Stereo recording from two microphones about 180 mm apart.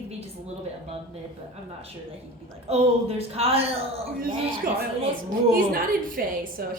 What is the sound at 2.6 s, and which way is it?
A woman's voice, 35° right (ahead or behind).